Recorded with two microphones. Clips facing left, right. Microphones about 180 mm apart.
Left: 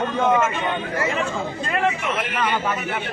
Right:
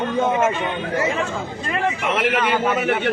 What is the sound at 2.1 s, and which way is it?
Speech, 80° right.